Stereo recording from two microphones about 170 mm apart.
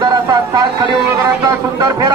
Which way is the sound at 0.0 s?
25° right (ahead or behind).